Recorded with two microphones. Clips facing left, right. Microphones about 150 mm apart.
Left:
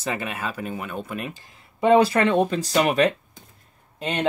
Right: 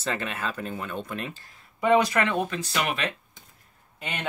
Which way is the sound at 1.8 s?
30° left (ahead or behind).